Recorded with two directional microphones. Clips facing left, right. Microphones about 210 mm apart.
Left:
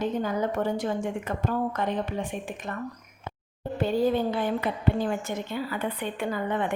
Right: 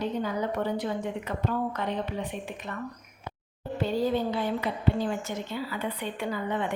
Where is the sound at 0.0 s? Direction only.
45° left (ahead or behind).